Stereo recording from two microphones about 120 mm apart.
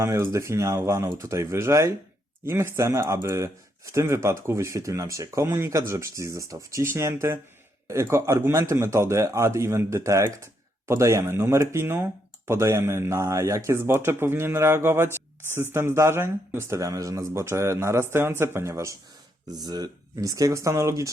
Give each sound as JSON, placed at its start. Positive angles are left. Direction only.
{"t": 0.0, "sound": "a man's voice", "side_deg": -25}